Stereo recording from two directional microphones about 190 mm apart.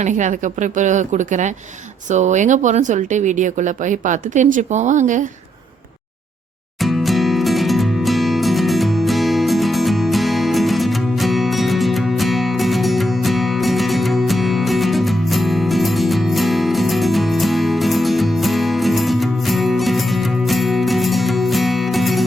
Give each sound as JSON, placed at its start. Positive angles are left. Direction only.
{"t": 0.0, "sound": "speech", "side_deg": -40}
{"t": 6.8, "sound": "music", "side_deg": 0}